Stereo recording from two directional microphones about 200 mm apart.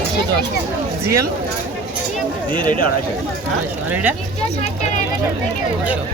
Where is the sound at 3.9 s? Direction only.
5° right (ahead or behind).